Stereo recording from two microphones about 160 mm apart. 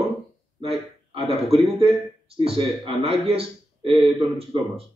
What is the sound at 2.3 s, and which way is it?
Speech, 35° right (ahead or behind).